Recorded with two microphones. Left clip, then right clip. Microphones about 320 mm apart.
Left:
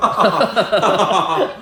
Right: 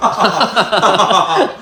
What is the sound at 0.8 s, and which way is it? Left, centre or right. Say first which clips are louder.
Chuckle: right 6 dB; left.